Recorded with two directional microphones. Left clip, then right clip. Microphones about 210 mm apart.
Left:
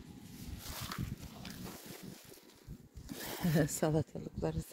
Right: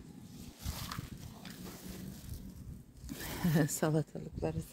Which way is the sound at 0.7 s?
15° left (ahead or behind).